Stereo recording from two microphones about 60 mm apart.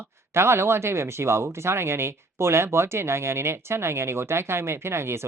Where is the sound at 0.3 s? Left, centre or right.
Right.